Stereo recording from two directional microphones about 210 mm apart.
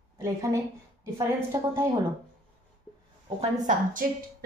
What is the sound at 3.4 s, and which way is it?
Speech, 35° right (ahead or behind).